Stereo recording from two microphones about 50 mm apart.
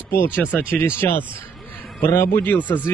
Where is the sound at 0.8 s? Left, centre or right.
Left.